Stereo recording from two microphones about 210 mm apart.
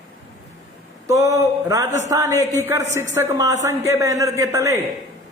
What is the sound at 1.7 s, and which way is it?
A woman's voice, 15° right (ahead or behind).